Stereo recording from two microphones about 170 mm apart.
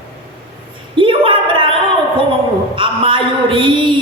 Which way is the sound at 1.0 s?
30° right (ahead or behind).